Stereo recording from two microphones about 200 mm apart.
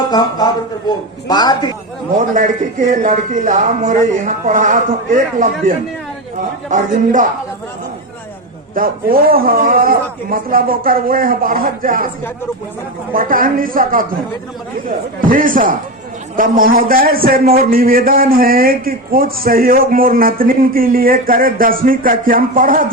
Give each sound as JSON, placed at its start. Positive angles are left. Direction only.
{"t": 0.0, "sound": "a man's voice", "side_deg": 20}
{"t": 2.1, "sound": "speech", "side_deg": -40}
{"t": 8.7, "sound": "a man's voice", "side_deg": -45}
{"t": 13.1, "sound": "a man's voice", "side_deg": -45}